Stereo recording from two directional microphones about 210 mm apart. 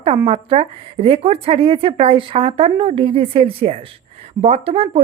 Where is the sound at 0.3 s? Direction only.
30° right (ahead or behind).